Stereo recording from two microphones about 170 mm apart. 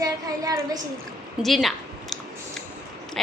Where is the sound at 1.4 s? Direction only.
Centre (ahead or behind).